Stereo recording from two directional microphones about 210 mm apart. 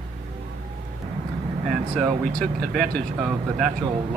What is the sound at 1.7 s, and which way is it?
Speech, centre (ahead or behind).